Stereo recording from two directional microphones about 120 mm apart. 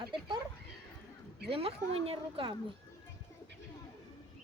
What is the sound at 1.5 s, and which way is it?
Speech, 55° right (ahead or behind).